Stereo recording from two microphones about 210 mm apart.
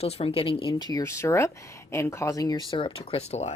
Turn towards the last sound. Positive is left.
turn(degrees=30)  # may be behind; listen again after turning